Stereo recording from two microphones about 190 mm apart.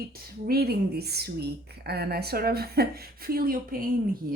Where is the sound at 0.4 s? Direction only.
55° right (ahead or behind).